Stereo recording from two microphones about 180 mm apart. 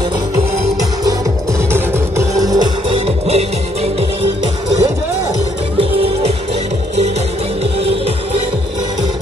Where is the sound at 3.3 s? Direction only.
35° right (ahead or behind).